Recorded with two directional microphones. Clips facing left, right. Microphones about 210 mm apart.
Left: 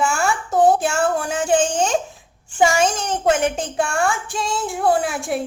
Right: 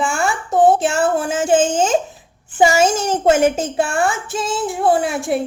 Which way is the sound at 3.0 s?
25° right (ahead or behind).